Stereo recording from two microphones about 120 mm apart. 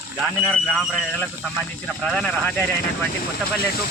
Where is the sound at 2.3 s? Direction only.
20° left (ahead or behind).